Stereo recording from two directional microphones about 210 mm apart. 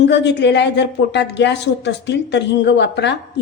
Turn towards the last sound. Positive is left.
turn(degrees=55)  # may be behind; listen again after turning